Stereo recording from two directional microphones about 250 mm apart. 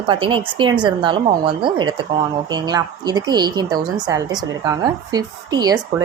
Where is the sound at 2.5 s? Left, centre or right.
Centre.